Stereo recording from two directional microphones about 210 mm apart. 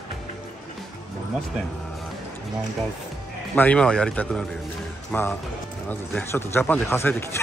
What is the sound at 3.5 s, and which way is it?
Speech, 5° left (ahead or behind).